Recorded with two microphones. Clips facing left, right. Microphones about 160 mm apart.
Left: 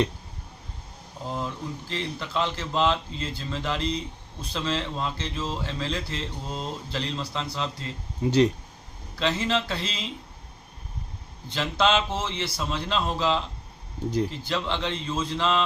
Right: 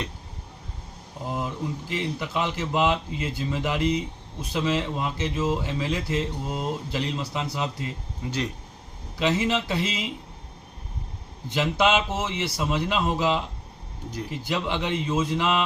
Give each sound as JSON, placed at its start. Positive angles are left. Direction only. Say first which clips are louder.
{"t": 1.9, "sound": "a man's voice", "louder": "right 1 dB", "side_deg": -10}
{"t": 8.2, "sound": "speech", "louder": "left 10 dB", "side_deg": 30}
{"t": 9.1, "sound": "a man's voice", "louder": "right 2 dB", "side_deg": -10}
{"t": 11.4, "sound": "a man's voice", "louder": "right 2 dB", "side_deg": -15}